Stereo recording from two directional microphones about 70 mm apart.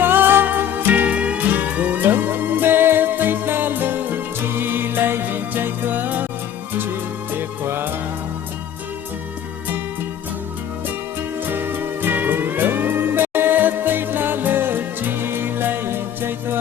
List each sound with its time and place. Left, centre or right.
0.0 s music: right
7.3 s music: right
11.4 s music: right